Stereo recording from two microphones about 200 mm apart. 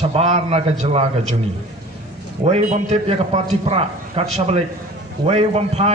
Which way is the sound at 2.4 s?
35° right (ahead or behind).